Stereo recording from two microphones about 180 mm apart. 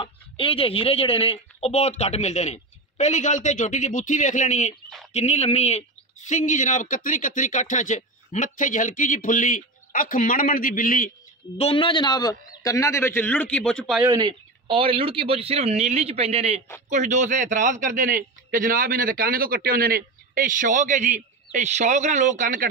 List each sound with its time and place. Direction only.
0.0 s speech: 30° left (ahead or behind); by 11.1 s 50° left (ahead or behind)
11.5 s a man's voice: 30° left (ahead or behind); by 14.0 s centre (ahead or behind)
14.0 s a man's voice: 25° right (ahead or behind); by 22.7 s 45° right (ahead or behind)